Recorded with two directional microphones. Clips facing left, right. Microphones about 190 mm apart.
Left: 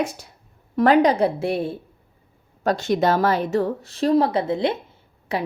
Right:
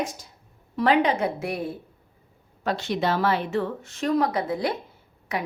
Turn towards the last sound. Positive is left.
turn(degrees=30)  # may be behind; listen again after turning